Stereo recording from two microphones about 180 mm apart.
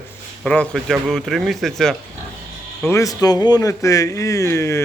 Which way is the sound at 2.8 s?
15° left (ahead or behind).